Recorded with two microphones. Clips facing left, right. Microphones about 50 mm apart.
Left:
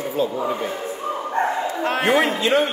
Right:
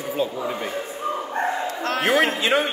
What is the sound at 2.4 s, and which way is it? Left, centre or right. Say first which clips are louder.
Speech: left 2 dB; centre.